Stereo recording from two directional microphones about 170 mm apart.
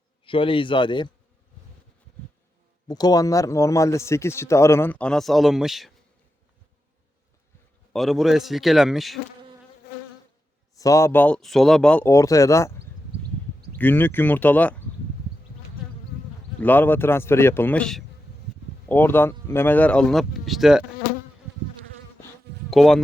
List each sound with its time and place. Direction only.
0.3 s a man's voice: 30° left (ahead or behind)
2.8 s a man's voice: 25° left (ahead or behind); by 5.9 s centre (ahead or behind)
7.9 s speech: centre (ahead or behind)
10.8 s a man's voice: 20° left (ahead or behind)
13.7 s a man's voice: 10° left (ahead or behind)
16.6 s a man's voice: 10° left (ahead or behind)
22.7 s speech: centre (ahead or behind)